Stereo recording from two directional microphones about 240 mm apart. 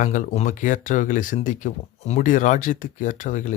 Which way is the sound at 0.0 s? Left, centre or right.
Left.